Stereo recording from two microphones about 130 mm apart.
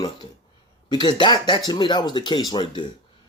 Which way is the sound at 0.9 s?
35° left (ahead or behind).